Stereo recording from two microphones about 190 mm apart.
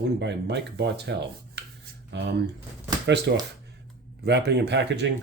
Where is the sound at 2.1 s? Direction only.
65° right (ahead or behind).